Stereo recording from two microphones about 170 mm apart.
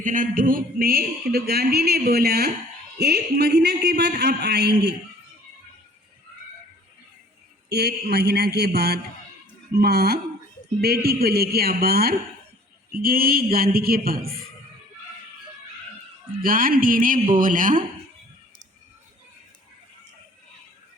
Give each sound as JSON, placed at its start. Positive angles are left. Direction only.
{"t": 0.0, "sound": "a man's voice", "side_deg": -50}
{"t": 7.7, "sound": "a man's voice", "side_deg": -65}
{"t": 16.4, "sound": "speech", "side_deg": -55}